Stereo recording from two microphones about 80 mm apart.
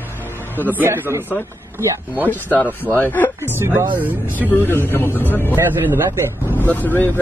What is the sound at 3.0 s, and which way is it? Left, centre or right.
Speech, left.